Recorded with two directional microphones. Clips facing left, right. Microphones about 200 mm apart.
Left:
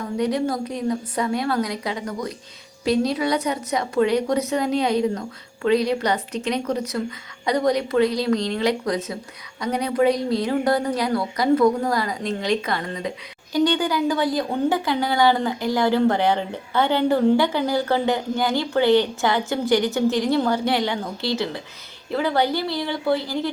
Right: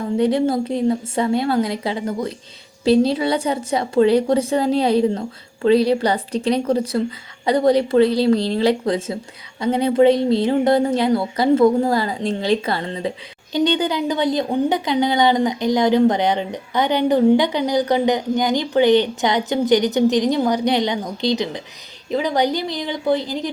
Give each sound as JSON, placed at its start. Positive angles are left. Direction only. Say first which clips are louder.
{"t": 0.2, "sound": "a woman's voice", "louder": "right 5 dB", "side_deg": -30}